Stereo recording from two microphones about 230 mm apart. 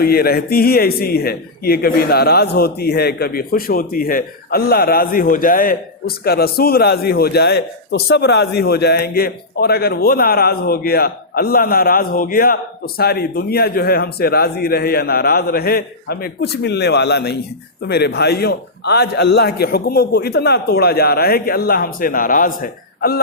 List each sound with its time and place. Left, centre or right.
0.0 s a man's voice: left